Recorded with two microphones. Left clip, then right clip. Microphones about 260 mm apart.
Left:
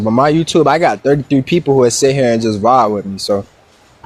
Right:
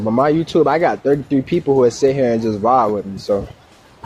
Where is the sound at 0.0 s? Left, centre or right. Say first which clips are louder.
Left 3 dB; left.